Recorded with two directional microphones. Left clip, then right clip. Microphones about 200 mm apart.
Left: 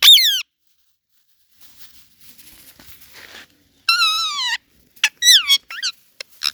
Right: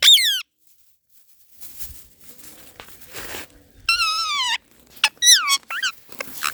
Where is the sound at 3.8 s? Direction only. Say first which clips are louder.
Left 3 dB; 15° left (ahead or behind).